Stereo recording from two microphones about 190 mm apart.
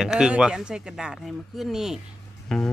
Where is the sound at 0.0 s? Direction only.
5° right (ahead or behind).